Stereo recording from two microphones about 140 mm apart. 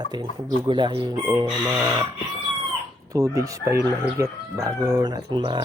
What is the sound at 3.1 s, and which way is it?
Speech, 25° right (ahead or behind).